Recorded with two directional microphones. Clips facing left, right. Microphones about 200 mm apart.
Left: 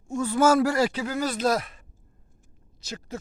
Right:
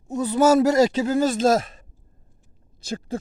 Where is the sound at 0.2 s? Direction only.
20° right (ahead or behind).